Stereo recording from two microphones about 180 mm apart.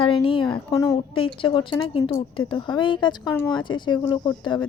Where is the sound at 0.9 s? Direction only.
30° left (ahead or behind).